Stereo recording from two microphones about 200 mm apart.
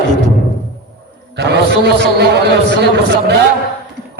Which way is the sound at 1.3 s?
55° right (ahead or behind).